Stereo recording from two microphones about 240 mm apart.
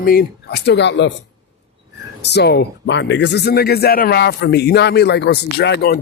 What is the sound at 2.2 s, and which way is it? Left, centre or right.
Speech, left.